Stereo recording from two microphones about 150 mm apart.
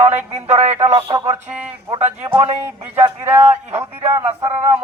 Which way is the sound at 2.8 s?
15° right (ahead or behind).